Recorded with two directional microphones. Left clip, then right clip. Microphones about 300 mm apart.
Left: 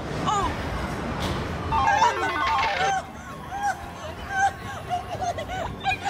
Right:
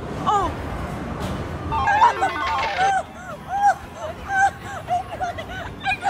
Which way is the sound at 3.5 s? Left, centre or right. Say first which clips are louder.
Right 9 dB; centre.